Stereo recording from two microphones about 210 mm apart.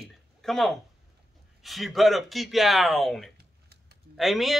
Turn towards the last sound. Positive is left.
turn(degrees=0)  # may be behind; listen again after turning